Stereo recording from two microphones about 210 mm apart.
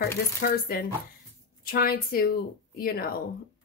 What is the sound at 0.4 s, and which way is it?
Speech, 45° left (ahead or behind).